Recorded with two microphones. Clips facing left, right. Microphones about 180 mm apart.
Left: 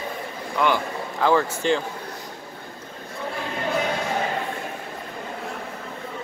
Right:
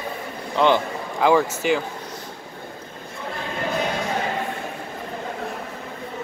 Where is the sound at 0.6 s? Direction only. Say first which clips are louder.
Right 4 dB; 25° right (ahead or behind).